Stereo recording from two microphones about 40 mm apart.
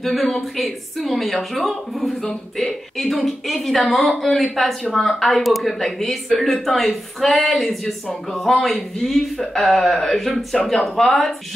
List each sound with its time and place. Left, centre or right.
0.0 s speech: centre